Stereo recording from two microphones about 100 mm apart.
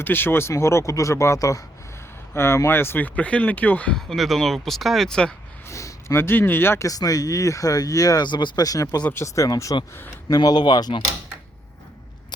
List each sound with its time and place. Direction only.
0.0 s speech: 20° left (ahead or behind)
5.6 s speech: 30° left (ahead or behind)
6.8 s speech: 40° left (ahead or behind)